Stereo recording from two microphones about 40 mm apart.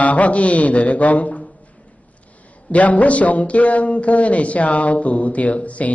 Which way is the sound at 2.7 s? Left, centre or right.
Left.